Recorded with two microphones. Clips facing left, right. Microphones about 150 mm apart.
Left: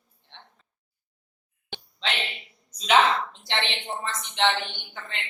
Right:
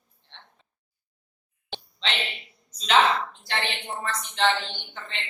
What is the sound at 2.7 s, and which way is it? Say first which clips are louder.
A woman's voice: even; 15° left (ahead or behind).